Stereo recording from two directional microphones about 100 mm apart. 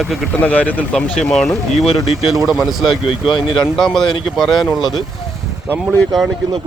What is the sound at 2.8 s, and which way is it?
Speech, 55° left (ahead or behind).